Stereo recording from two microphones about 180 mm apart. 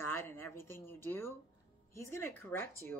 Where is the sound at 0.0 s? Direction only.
15° left (ahead or behind).